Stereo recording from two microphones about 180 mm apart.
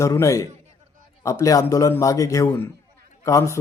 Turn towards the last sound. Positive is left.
turn(degrees=15)  # may be behind; listen again after turning